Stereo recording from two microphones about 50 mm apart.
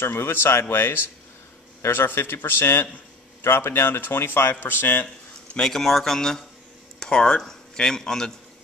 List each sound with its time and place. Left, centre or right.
0.0 s a man's voice: left
4.6 s speech: left
5.0 s speech: centre